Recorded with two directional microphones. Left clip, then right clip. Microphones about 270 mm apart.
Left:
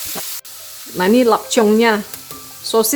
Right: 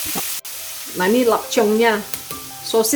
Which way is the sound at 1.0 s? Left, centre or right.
Left.